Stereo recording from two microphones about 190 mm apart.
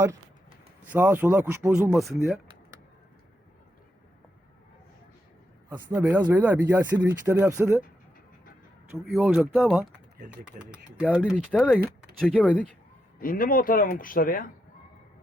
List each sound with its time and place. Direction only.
0.9 s speech: 10° right (ahead or behind)
5.6 s speech: 10° right (ahead or behind)
9.1 s speech: 5° right (ahead or behind)
13.1 s speech: 45° left (ahead or behind)